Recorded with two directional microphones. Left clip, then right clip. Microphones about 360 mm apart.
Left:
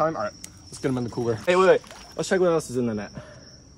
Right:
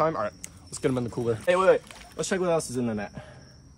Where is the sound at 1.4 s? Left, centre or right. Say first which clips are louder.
Left 3 dB; left.